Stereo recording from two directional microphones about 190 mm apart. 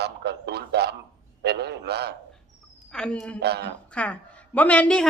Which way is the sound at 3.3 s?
60° right (ahead or behind).